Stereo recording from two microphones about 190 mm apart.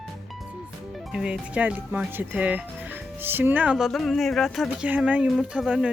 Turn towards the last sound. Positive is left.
turn(degrees=-5)  # may be behind; listen again after turning